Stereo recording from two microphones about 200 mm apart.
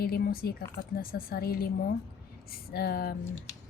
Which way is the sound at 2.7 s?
50° left (ahead or behind).